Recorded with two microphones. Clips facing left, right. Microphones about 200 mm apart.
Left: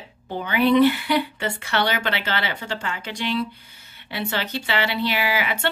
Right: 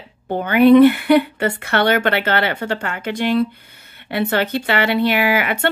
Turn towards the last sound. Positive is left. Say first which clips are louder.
# right 6 dB
turn(degrees=-55)  # may be behind; listen again after turning